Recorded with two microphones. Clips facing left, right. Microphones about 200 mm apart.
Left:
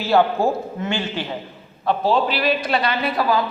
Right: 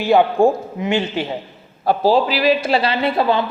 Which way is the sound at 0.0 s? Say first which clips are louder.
Right 4 dB; 15° right (ahead or behind).